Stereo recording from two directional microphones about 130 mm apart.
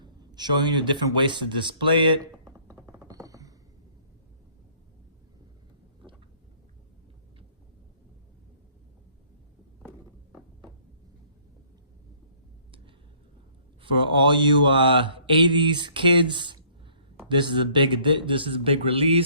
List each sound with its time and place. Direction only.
0.0 s speech: 35° right (ahead or behind)
2.9 s a sound: 25° right (ahead or behind)
14.0 s speech: 40° right (ahead or behind)